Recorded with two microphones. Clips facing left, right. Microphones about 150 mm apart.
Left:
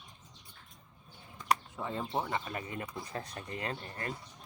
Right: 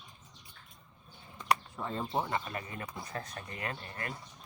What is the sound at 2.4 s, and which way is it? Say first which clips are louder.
Speech: left 1 dB; 25° left (ahead or behind).